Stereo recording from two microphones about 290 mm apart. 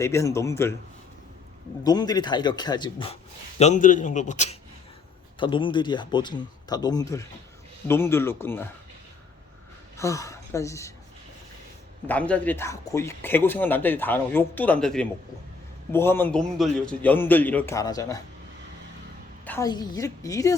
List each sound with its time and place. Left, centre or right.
0.0 s speech: centre
1.8 s a man's voice: centre
10.0 s a woman's voice: centre
12.0 s speech: centre
19.5 s speech: centre